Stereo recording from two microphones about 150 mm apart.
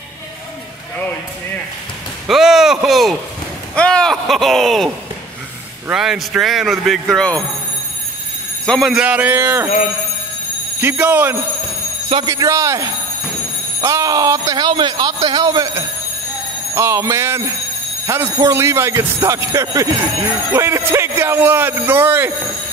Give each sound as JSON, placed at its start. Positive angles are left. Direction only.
{"t": 2.2, "sound": "a sound", "side_deg": 0}
{"t": 2.9, "sound": "speech", "side_deg": 0}
{"t": 8.6, "sound": "speech", "side_deg": 5}
{"t": 8.9, "sound": "a man's voice", "side_deg": -10}
{"t": 10.8, "sound": "a man's voice", "side_deg": -10}